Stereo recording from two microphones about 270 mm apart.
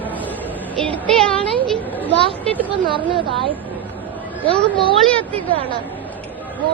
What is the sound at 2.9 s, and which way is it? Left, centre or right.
Speech, centre.